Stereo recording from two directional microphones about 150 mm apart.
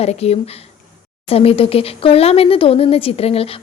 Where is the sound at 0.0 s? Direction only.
45° left (ahead or behind).